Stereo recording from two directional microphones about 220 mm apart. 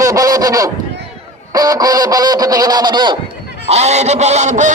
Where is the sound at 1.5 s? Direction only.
15° right (ahead or behind).